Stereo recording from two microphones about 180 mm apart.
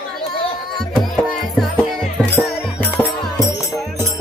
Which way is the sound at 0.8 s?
Centre (ahead or behind).